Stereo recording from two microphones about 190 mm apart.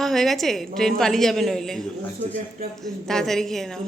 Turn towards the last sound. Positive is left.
turn(degrees=0)  # may be behind; listen again after turning